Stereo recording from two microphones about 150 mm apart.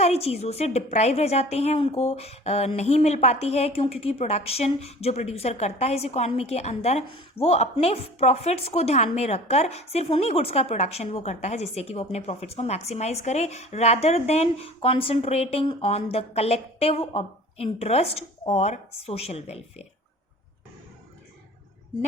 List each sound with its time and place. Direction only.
0.0 s speech: 45° left (ahead or behind)